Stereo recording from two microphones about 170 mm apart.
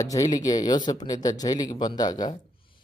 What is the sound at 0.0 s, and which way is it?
Speech, 20° left (ahead or behind).